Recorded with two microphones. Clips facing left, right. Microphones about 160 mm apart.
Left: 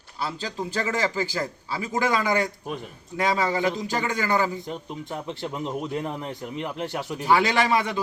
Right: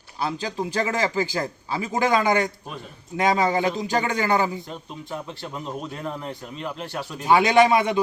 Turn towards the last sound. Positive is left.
turn(degrees=-20)  # may be behind; listen again after turning